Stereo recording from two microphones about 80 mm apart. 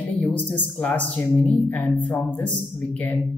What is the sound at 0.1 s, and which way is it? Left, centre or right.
A man's voice, centre.